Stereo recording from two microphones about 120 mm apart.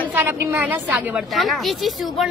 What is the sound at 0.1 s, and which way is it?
Speech, 20° right (ahead or behind).